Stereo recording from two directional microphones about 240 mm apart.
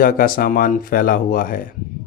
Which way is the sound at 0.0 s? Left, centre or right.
Left.